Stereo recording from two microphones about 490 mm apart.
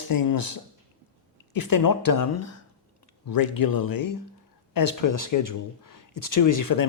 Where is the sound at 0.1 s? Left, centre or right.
Left.